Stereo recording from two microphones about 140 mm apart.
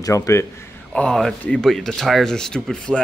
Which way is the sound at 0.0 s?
20° left (ahead or behind).